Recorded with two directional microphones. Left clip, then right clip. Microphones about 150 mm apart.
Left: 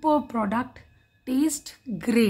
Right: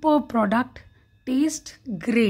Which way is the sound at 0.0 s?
30° right (ahead or behind).